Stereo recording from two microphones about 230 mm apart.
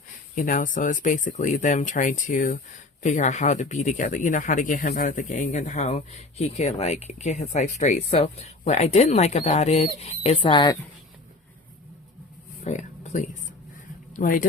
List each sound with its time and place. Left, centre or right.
0.3 s speech: left
12.6 s speech: left